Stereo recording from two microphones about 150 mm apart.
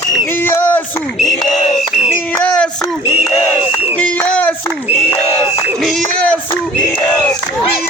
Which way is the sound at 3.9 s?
10° left (ahead or behind).